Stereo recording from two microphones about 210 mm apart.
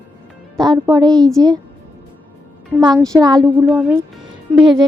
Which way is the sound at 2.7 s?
15° right (ahead or behind).